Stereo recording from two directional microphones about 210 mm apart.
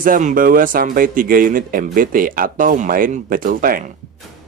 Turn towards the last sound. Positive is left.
turn(degrees=-40)  # may be behind; listen again after turning